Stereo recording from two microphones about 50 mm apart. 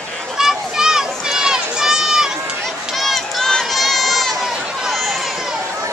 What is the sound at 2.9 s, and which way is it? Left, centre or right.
Run, centre.